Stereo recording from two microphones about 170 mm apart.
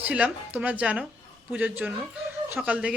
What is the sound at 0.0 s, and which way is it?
Speech, 10° right (ahead or behind).